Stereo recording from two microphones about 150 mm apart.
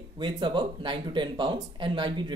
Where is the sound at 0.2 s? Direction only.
30° right (ahead or behind).